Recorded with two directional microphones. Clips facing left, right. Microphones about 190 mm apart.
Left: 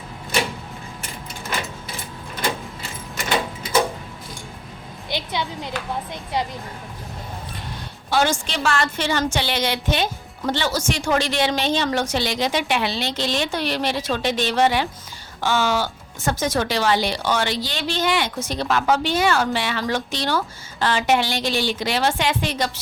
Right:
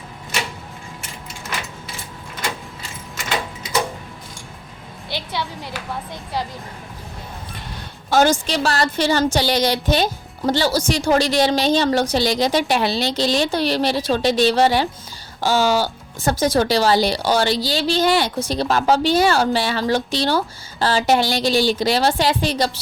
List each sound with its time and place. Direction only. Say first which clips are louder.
5.0 s music: left 1 dB; 20° left (ahead or behind)
6.3 s speech: left 1 dB; 20° left (ahead or behind)
8.1 s speech: right 5 dB; 40° right (ahead or behind)